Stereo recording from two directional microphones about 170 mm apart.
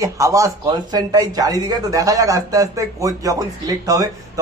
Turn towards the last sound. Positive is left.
turn(degrees=-20)  # may be behind; listen again after turning